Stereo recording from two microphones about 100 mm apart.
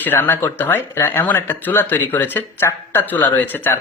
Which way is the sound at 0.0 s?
20° left (ahead or behind).